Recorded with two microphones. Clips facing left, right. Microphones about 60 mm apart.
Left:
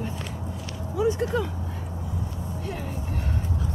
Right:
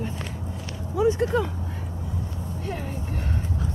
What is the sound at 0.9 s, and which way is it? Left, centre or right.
Speech, right.